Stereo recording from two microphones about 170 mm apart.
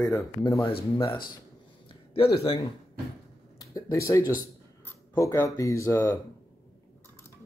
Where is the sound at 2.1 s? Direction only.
35° left (ahead or behind).